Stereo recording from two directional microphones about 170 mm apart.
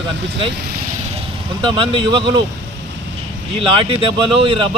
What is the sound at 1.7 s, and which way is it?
Speech, 25° right (ahead or behind).